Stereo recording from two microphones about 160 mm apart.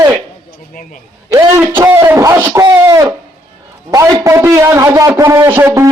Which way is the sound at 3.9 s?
20° right (ahead or behind).